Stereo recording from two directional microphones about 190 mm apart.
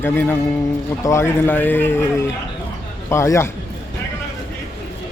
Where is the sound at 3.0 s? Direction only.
15° left (ahead or behind).